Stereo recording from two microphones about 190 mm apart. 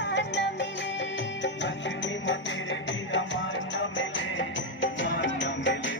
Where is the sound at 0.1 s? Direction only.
65° left (ahead or behind).